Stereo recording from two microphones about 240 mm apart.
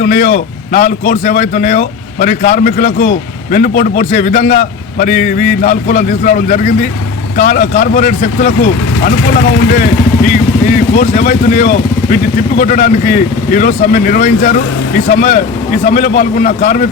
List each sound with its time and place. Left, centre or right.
0.0 s speech: left
10.9 s speech: left